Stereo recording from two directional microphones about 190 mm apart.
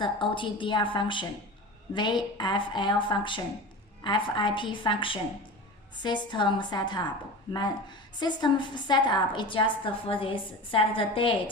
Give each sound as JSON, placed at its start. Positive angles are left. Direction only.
{"t": 0.0, "sound": "a woman's voice", "side_deg": 25}